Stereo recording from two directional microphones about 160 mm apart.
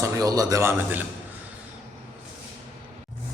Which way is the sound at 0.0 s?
20° right (ahead or behind).